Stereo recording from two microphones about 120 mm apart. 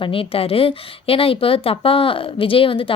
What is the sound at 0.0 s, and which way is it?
Speech, 50° left (ahead or behind).